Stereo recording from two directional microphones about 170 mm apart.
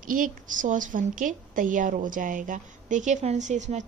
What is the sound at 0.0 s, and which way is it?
A woman's voice, 55° right (ahead or behind).